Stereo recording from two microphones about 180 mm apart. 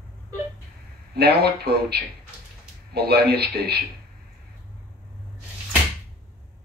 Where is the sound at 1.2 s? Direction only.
60° right (ahead or behind).